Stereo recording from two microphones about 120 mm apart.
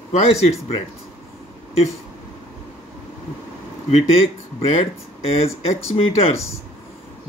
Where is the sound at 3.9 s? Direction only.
55° left (ahead or behind).